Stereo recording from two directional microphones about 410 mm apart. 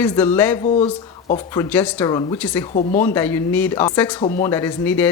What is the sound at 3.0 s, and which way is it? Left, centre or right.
Speech, centre.